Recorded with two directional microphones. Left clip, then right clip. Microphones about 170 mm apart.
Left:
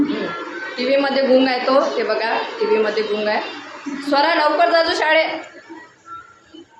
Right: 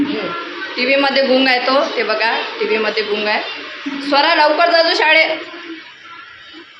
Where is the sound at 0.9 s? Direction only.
5° left (ahead or behind).